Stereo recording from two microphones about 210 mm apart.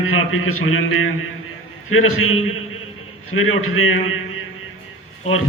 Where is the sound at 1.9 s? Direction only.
75° left (ahead or behind).